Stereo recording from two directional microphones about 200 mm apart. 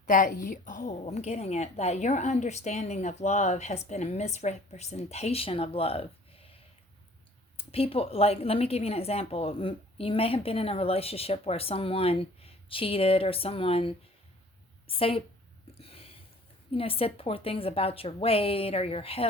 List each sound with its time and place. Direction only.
0.0 s a woman's voice: 45° left (ahead or behind)
7.5 s a woman's voice: 30° left (ahead or behind)
15.8 s a sound: 30° left (ahead or behind)
16.7 s a woman's voice: 30° left (ahead or behind)